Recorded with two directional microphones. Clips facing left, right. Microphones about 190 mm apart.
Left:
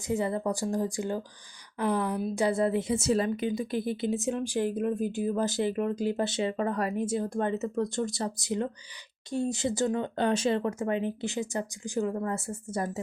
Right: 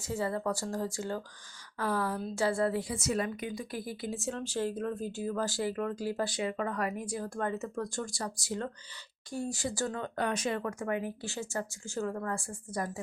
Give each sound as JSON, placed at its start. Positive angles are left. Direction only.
{"t": 0.1, "sound": "a woman's voice", "side_deg": 20}